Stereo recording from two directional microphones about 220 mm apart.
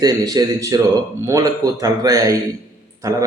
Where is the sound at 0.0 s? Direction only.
15° right (ahead or behind).